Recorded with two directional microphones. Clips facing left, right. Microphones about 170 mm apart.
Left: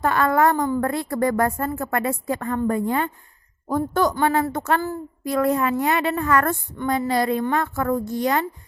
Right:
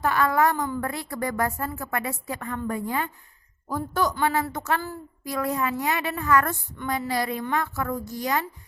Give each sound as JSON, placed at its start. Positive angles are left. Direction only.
{"t": 0.0, "sound": "a woman's voice", "side_deg": 55}